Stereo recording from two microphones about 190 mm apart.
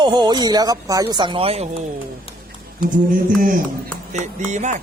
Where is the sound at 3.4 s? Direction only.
45° right (ahead or behind).